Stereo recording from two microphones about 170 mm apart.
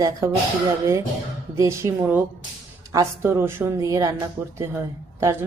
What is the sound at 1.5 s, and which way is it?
A woman's voice, 15° right (ahead or behind).